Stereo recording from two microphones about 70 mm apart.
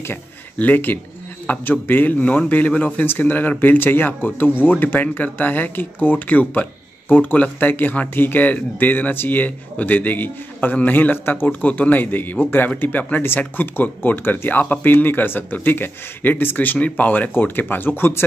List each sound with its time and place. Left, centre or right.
0.6 s speech: left